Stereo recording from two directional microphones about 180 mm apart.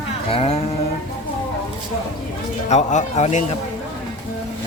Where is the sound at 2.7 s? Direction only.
40° left (ahead or behind).